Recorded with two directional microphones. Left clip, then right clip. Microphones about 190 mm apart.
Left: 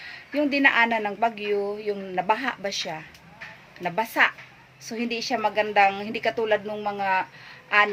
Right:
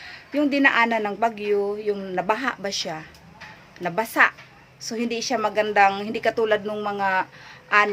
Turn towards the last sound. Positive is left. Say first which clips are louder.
# right 1 dB
turn(degrees=-5)  # may be behind; listen again after turning